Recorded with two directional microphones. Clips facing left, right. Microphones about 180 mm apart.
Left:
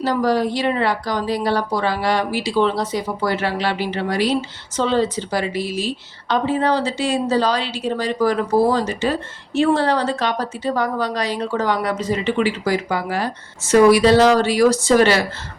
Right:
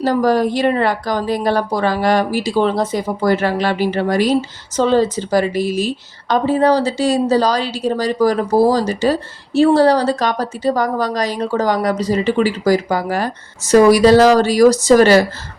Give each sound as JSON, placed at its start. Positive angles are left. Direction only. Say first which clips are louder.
{"t": 0.0, "sound": "a woman's voice", "louder": "right 4 dB", "side_deg": -45}